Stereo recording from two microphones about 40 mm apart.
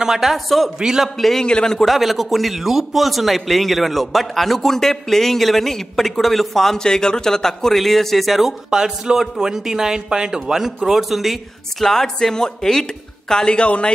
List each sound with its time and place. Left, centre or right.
0.0 s speech: centre
1.1 s a man's voice: centre
1.4 s speech: centre
1.8 s a man's voice: centre
8.6 s a man's voice: centre
11.8 s a man's voice: centre; by 13.9 s left